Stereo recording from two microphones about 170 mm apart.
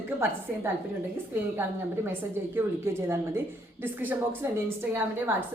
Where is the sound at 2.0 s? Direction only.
15° right (ahead or behind).